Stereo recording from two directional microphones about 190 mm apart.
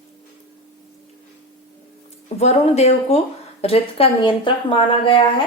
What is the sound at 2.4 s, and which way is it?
Speech, 35° left (ahead or behind).